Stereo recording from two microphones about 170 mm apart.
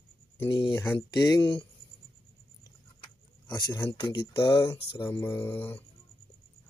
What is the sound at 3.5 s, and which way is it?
Speech, 25° left (ahead or behind).